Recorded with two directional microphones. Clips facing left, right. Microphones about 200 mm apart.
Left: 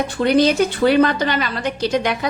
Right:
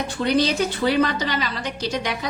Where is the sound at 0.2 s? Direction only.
55° left (ahead or behind).